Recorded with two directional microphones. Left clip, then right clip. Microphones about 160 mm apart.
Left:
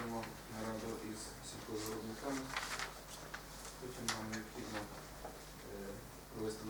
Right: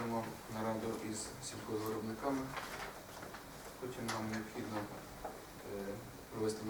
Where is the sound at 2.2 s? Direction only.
10° left (ahead or behind).